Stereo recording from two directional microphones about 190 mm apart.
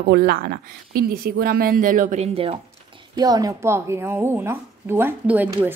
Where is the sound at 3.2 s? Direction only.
20° right (ahead or behind).